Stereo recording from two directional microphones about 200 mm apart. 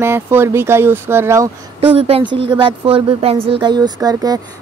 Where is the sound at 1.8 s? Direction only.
30° right (ahead or behind).